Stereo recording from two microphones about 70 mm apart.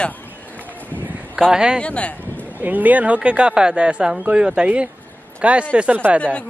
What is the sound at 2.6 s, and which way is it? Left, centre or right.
Speech, right.